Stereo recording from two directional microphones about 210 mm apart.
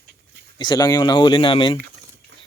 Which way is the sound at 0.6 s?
20° left (ahead or behind).